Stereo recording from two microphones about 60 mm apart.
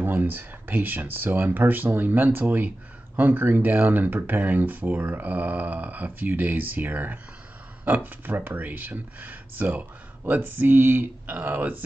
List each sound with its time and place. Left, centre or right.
0.0 s speech: right